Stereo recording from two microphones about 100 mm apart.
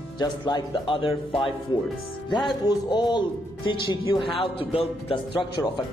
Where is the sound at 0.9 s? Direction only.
60° left (ahead or behind).